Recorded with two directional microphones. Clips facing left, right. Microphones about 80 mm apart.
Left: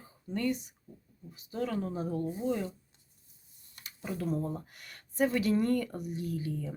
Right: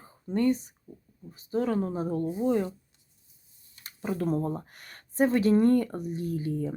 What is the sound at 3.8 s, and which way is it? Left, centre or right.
Speech, right.